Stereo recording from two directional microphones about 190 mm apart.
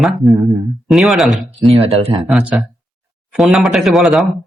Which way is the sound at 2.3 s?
5° right (ahead or behind).